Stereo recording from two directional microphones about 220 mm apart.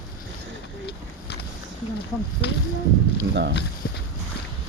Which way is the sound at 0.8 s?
50° left (ahead or behind).